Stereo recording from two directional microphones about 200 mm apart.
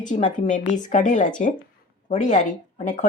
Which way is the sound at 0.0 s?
40° left (ahead or behind).